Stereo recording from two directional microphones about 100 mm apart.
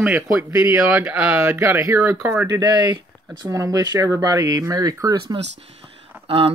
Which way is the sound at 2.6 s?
50° right (ahead or behind).